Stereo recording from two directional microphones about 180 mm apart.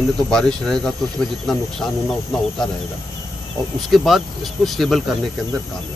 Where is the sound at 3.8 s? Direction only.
Centre (ahead or behind).